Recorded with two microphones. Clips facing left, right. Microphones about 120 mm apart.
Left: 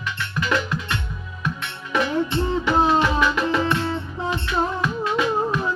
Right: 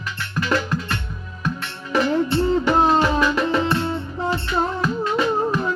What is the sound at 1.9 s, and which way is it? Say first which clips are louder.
Music: right 3 dB; 35° right (ahead or behind).